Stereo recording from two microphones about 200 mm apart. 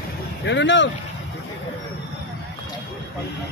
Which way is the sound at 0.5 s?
65° left (ahead or behind).